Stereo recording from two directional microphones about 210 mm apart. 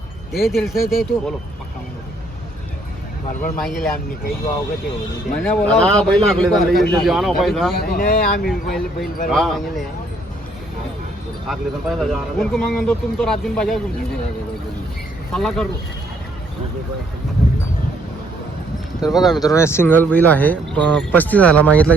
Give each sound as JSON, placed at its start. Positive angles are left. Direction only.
{"t": 0.3, "sound": "speech", "side_deg": 0}
{"t": 3.6, "sound": "speech", "side_deg": 0}
{"t": 5.4, "sound": "speech", "side_deg": 5}
{"t": 7.7, "sound": "speech", "side_deg": 45}
{"t": 8.4, "sound": "speech", "side_deg": 0}
{"t": 11.4, "sound": "speech", "side_deg": 0}
{"t": 15.3, "sound": "speech", "side_deg": 0}
{"t": 19.1, "sound": "speech", "side_deg": 0}
{"t": 19.4, "sound": "speech", "side_deg": 15}